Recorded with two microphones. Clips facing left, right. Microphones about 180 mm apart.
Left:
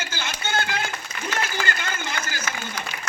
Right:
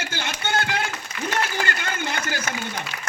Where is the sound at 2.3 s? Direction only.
50° right (ahead or behind).